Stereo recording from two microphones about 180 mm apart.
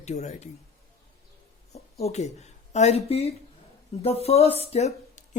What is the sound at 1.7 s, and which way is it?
Speech, 35° left (ahead or behind).